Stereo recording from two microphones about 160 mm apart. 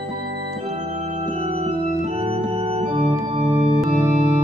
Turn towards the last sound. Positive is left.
turn(degrees=-35)  # may be behind; listen again after turning